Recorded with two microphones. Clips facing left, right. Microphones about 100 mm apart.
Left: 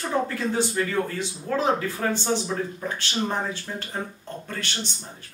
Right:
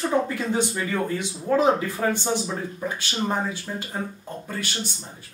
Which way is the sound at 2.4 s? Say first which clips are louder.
Even; 5° right (ahead or behind).